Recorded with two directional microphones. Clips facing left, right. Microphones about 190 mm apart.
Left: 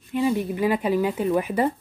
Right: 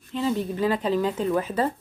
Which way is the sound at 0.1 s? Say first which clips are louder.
Left 3 dB; 15° left (ahead or behind).